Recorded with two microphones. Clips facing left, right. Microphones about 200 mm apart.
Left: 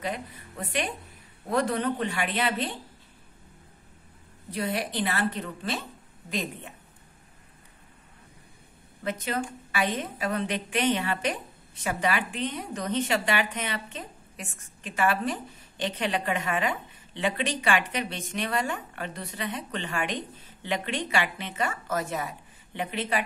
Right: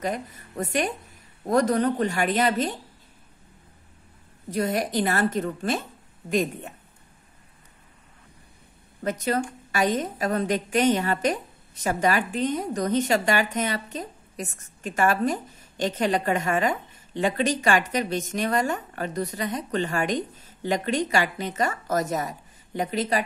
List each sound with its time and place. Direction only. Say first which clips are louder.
0.0 s a woman's voice: right 4 dB; 45° right (ahead or behind)
4.5 s a woman's voice: right 5 dB; 45° right (ahead or behind)
9.0 s a woman's voice: right 5 dB; 45° right (ahead or behind)